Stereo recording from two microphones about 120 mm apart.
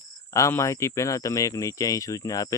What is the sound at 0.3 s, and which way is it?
Speech, 25° left (ahead or behind).